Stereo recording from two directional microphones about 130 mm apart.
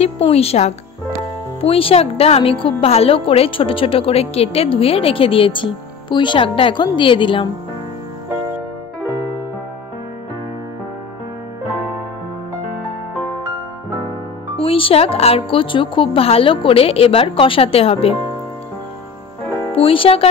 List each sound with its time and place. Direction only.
0.0 s a woman's voice: 50° left (ahead or behind)
14.6 s a woman's voice: 45° left (ahead or behind)
19.7 s a woman's voice: 45° left (ahead or behind)